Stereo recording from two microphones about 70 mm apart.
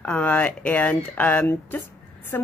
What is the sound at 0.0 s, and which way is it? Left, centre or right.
A woman's voice, left.